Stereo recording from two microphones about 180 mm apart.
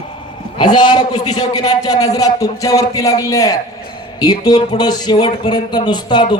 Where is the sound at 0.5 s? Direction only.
25° left (ahead or behind).